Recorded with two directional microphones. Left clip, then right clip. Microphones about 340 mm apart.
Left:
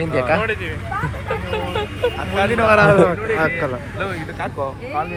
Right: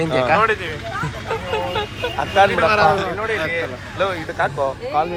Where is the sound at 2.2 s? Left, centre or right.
Right.